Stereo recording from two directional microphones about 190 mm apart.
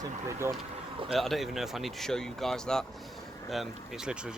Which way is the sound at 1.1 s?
Centre (ahead or behind).